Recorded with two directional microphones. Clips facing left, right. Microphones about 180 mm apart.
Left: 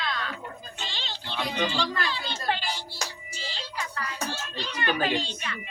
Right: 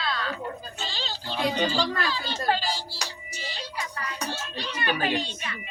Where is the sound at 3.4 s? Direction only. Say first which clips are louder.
Right 2 dB; 15° right (ahead or behind).